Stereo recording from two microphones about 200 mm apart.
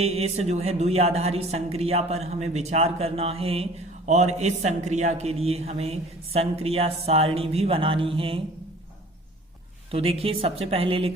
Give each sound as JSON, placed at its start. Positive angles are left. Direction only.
{"t": 0.0, "sound": "a woman's voice", "side_deg": -30}
{"t": 9.9, "sound": "a woman's voice", "side_deg": -30}